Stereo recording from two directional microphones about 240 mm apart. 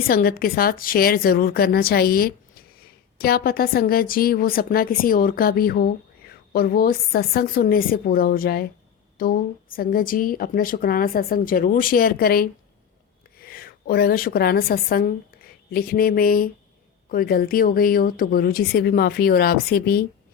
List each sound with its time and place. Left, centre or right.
0.1 s a woman's voice: left